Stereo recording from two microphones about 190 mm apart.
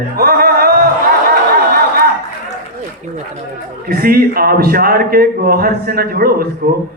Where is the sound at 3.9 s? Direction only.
50° right (ahead or behind).